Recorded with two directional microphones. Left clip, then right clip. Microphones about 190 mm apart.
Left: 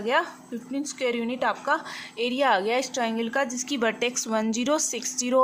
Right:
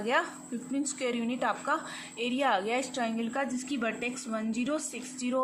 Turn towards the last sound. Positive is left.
turn(degrees=40)  # may be behind; listen again after turning